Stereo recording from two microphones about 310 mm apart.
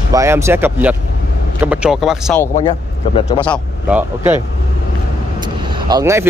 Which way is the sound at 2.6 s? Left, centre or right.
Centre.